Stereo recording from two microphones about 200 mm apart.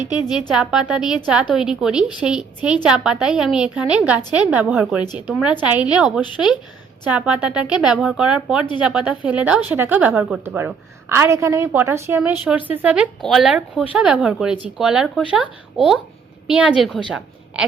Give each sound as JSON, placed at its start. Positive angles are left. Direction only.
{"t": 0.1, "sound": "a woman's voice", "side_deg": 20}
{"t": 0.5, "sound": "speech", "side_deg": -5}
{"t": 5.0, "sound": "a woman's voice", "side_deg": 20}
{"t": 5.3, "sound": "speech", "side_deg": -5}
{"t": 17.1, "sound": "a sound", "side_deg": -5}